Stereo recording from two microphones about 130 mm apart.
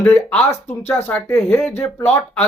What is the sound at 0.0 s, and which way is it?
Speech, 10° left (ahead or behind).